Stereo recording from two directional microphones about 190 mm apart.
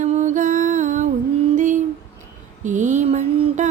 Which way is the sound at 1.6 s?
40° right (ahead or behind).